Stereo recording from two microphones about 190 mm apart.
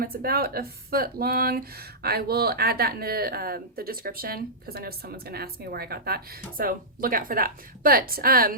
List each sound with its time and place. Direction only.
0.0 s speech: 50° right (ahead or behind)